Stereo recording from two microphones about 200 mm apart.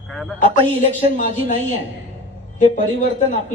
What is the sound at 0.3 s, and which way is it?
A man's voice, 40° left (ahead or behind).